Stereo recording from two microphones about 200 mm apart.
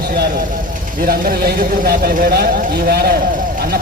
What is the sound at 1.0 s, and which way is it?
A man's voice, 45° right (ahead or behind).